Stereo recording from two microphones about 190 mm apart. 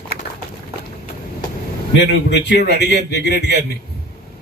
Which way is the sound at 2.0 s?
60° left (ahead or behind).